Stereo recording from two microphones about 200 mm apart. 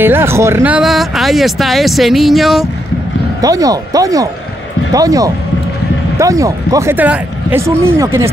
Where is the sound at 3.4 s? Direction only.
20° right (ahead or behind).